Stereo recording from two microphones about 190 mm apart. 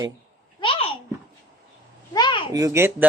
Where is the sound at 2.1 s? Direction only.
25° left (ahead or behind).